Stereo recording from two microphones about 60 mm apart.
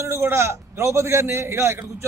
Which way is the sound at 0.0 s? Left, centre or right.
Right.